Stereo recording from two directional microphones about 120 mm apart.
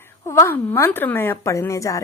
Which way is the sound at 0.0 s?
20° left (ahead or behind).